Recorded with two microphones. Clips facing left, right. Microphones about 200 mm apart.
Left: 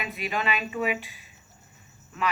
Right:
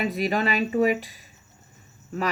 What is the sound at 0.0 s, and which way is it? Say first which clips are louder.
Speech: right 6 dB; 40° right (ahead or behind).